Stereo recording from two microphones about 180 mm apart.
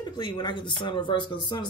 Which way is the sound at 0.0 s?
25° left (ahead or behind).